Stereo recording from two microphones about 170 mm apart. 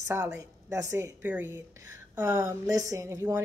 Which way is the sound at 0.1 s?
15° right (ahead or behind).